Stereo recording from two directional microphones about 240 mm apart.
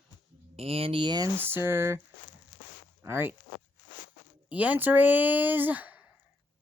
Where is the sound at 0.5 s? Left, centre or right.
Right.